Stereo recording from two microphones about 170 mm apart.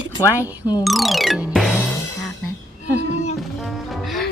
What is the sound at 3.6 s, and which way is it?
Music, centre (ahead or behind).